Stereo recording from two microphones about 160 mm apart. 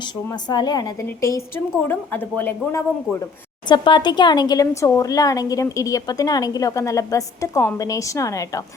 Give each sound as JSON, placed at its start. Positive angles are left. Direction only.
{"t": 0.0, "sound": "speech", "side_deg": 25}
{"t": 3.7, "sound": "speech", "side_deg": 30}